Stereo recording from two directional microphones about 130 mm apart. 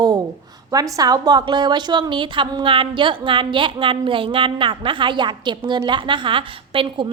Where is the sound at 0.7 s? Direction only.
30° right (ahead or behind).